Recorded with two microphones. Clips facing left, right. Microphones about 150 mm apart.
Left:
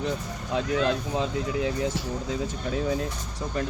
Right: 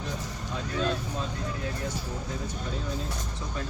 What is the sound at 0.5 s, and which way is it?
Speech, 85° left.